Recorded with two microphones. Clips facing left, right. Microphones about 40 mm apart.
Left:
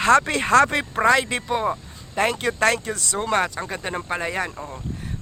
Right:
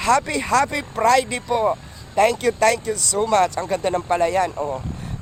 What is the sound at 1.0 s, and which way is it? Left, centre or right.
Speech, left.